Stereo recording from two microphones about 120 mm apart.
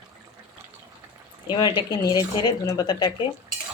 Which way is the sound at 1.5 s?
40° left (ahead or behind).